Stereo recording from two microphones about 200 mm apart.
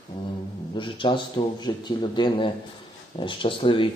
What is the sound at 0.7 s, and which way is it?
A man's voice, 25° left (ahead or behind).